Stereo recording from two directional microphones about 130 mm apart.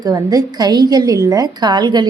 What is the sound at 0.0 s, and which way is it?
A woman's voice, 30° right (ahead or behind).